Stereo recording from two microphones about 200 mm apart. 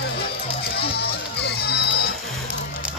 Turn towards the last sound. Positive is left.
turn(degrees=55)  # may be behind; listen again after turning